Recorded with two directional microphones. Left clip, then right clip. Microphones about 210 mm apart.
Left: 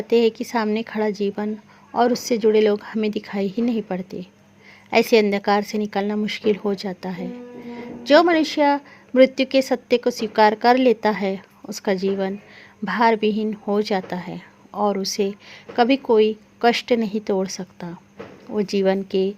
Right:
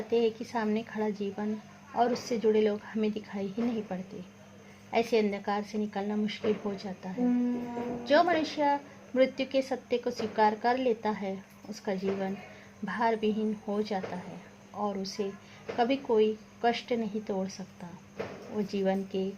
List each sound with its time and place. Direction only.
0.1 s a woman's voice: 35° left (ahead or behind)